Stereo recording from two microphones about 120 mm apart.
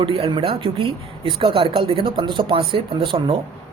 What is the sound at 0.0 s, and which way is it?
Speech, 50° right (ahead or behind).